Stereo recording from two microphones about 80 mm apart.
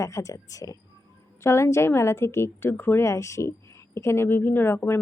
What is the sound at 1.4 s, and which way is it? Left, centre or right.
Speech, left.